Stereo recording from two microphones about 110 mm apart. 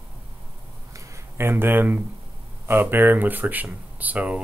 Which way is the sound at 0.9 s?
25° right (ahead or behind).